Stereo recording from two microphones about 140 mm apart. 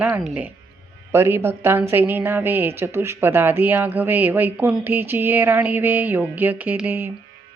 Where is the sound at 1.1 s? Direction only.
15° right (ahead or behind).